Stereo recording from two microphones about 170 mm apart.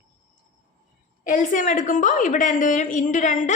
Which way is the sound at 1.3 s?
50° left (ahead or behind).